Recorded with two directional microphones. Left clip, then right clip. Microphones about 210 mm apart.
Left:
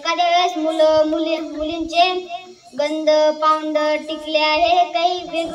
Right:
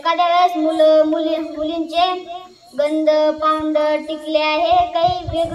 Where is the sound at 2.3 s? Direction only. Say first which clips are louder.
Even; 40° left (ahead or behind).